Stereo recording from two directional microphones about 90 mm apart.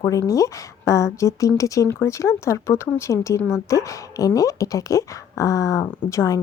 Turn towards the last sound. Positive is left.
turn(degrees=35)  # may be behind; listen again after turning